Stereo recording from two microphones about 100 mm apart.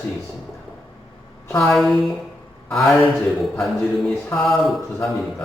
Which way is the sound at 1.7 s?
Centre (ahead or behind).